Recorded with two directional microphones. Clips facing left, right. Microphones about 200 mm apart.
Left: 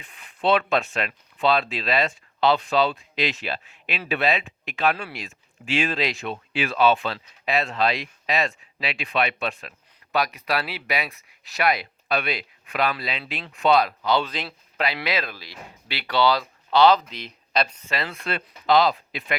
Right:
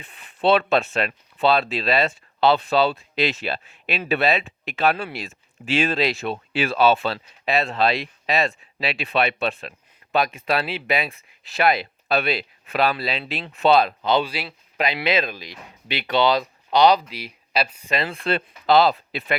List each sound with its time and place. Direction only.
0.0 s speech: 30° right (ahead or behind)
14.3 s speech: 10° right (ahead or behind)
14.8 s speech: 20° right (ahead or behind)
17.9 s speech: 25° right (ahead or behind)